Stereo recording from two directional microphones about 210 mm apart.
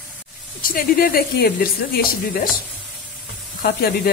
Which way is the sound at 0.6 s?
45° left (ahead or behind).